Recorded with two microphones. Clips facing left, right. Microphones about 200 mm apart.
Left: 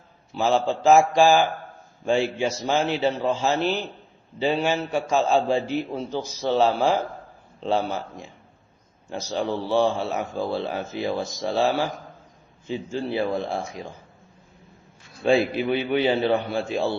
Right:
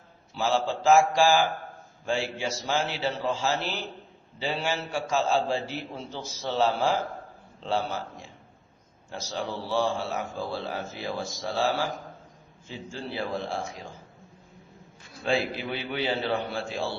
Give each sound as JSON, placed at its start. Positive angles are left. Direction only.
{"t": 0.3, "sound": "a man's voice", "side_deg": 20}
{"t": 11.9, "sound": "a man's voice", "side_deg": 0}
{"t": 12.9, "sound": "a man's voice", "side_deg": 15}
{"t": 15.2, "sound": "a man's voice", "side_deg": 15}